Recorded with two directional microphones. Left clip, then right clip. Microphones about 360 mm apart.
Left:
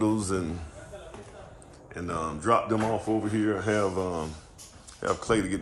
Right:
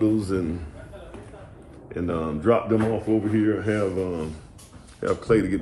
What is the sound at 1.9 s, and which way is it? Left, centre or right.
Speech, centre.